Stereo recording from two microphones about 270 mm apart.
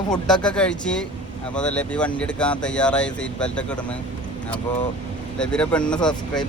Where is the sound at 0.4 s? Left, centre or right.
Centre.